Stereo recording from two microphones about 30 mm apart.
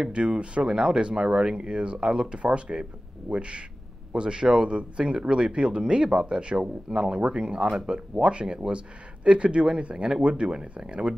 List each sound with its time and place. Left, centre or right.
0.1 s speech: right
0.7 s speech: right
1.2 s speech: centre
1.6 s speech: right